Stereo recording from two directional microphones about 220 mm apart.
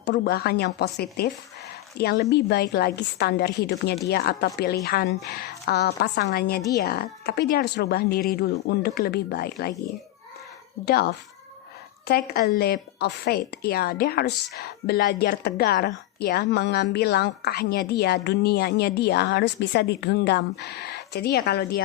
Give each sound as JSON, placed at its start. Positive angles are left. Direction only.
{"t": 0.0, "sound": "a woman's voice", "side_deg": 50}
{"t": 10.8, "sound": "a woman's voice", "side_deg": 45}